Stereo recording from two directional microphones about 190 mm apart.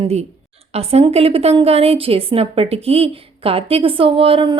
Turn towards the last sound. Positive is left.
turn(degrees=-30)  # may be behind; listen again after turning